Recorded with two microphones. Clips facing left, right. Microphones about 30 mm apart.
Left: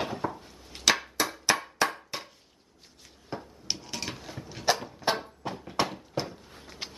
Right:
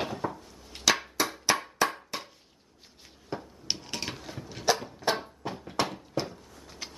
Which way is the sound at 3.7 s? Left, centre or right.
Centre.